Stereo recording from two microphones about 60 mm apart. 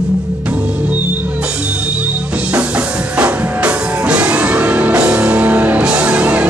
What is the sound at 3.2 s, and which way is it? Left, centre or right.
Music, right.